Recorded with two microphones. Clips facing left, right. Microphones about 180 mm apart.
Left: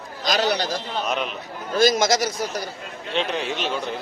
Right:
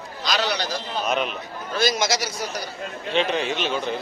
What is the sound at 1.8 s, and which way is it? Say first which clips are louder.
Speech: left 5 dB; 45° left (ahead or behind).